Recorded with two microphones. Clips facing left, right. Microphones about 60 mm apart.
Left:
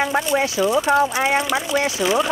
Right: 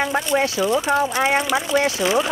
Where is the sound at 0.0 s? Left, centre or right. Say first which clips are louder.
Even; centre.